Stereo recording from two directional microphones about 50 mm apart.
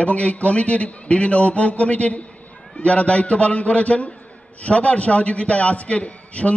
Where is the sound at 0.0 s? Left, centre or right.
Left.